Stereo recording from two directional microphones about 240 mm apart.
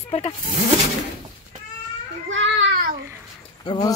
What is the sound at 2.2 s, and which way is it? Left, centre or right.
Children playing, right.